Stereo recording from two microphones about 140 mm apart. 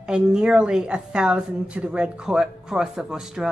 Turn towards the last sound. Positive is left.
turn(degrees=-5)  # may be behind; listen again after turning